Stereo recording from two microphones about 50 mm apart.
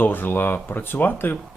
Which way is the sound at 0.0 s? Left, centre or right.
Left.